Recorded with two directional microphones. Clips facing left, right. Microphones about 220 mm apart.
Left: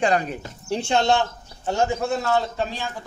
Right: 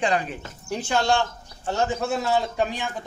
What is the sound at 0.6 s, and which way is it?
Speech, 25° left (ahead or behind).